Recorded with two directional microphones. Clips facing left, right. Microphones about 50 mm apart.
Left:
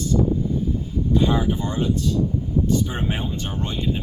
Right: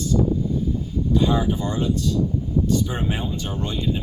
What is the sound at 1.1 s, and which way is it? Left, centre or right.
Speech, left.